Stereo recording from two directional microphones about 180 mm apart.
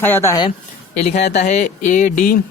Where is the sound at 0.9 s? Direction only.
40° left (ahead or behind).